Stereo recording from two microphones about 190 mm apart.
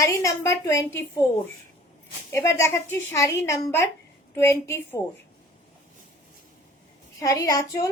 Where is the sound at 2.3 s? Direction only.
15° left (ahead or behind).